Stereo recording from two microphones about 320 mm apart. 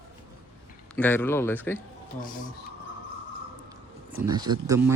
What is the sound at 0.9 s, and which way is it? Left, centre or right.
Speech, centre.